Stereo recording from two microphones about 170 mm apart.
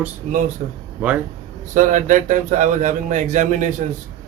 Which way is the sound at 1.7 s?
50° right (ahead or behind).